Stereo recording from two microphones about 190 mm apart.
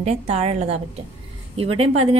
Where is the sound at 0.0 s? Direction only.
35° right (ahead or behind).